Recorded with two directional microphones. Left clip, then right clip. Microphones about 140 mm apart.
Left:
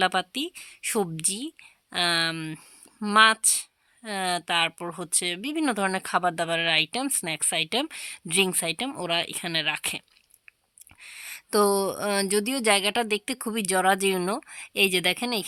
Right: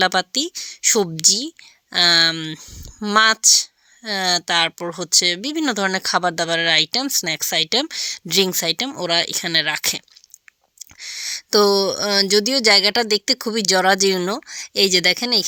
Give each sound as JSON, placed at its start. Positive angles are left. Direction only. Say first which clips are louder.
{"t": 0.0, "sound": "speech", "louder": "right 7 dB", "side_deg": -35}
{"t": 11.0, "sound": "speech", "louder": "right 12 dB", "side_deg": -30}